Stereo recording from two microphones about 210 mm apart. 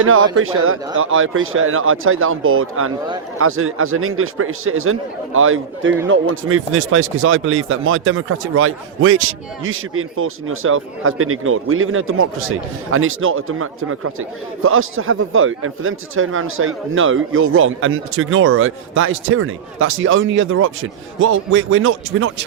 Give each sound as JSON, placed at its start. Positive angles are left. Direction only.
{"t": 0.0, "sound": "speech", "side_deg": -75}